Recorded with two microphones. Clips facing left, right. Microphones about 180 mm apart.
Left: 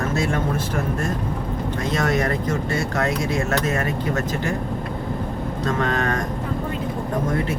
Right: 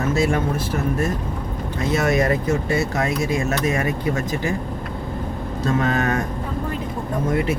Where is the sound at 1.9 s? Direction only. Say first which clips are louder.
Right 3 dB; 10° right (ahead or behind).